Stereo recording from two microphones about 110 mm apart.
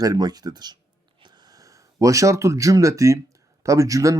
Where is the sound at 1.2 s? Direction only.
30° right (ahead or behind).